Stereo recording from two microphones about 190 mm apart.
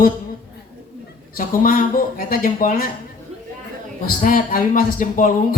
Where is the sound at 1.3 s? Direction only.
50° left (ahead or behind).